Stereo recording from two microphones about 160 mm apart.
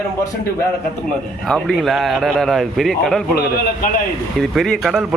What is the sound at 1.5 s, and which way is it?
A man's voice, 5° left (ahead or behind).